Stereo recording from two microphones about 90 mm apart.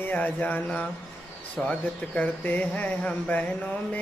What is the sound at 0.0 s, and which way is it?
Speech, 15° left (ahead or behind).